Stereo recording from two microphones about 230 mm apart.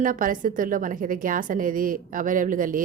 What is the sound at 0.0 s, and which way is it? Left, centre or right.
A woman's voice, right.